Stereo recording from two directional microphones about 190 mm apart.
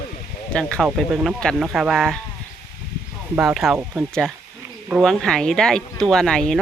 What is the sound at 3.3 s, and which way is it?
Speech, 5° right (ahead or behind).